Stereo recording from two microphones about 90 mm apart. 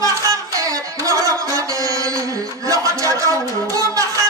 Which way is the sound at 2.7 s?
40° right (ahead or behind).